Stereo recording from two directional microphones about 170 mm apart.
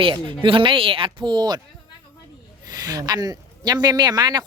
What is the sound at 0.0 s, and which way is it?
Speech, 30° right (ahead or behind).